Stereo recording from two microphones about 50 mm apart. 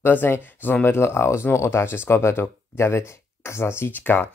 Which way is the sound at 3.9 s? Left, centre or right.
Left.